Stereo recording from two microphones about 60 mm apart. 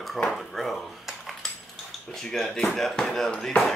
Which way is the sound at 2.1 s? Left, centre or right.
Centre.